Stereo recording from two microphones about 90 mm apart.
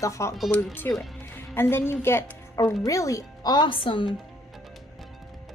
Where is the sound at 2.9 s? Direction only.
40° left (ahead or behind).